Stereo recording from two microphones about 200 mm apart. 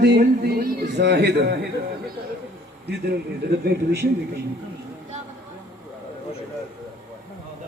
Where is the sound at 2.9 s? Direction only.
55° right (ahead or behind).